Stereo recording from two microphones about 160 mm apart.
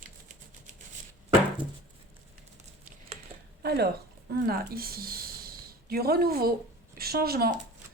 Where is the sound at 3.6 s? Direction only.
80° right.